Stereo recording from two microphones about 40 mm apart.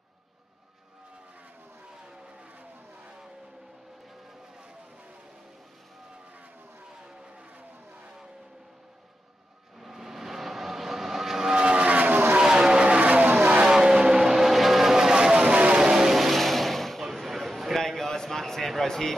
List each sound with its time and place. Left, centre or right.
7.1 s vehicle: right
9.8 s vehicle: centre
11.5 s vehicle: right
12.4 s vehicle: centre; by 13.4 s right
13.7 s vehicle: centre
15.1 s vehicle: right
15.8 s vehicle: centre
16.2 s vehicle: centre
17.0 s a sound: centre
17.7 s a sound: centre